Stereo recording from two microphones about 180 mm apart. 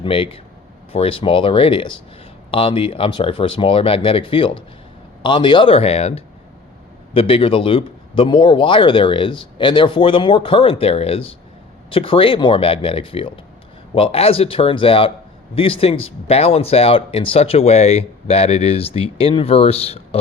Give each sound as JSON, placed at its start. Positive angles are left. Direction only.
{"t": 0.0, "sound": "a man's voice", "side_deg": 30}